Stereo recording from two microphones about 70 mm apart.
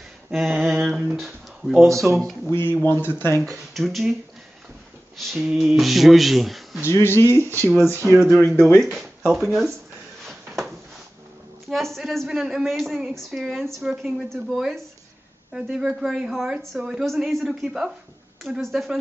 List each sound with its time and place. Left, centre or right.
0.3 s a woman's voice: centre
2.7 s speech: left
3.7 s a woman's voice: centre
5.1 s a sound: centre
5.4 s a woman's voice: centre
6.9 s speech: left
7.4 s speech: right
8.5 s speech: left
9.3 s a woman's voice: centre
10.2 s a sound: centre
11.7 s a woman's voice: centre
12.3 s a woman's voice: centre
17.0 s a woman's voice: centre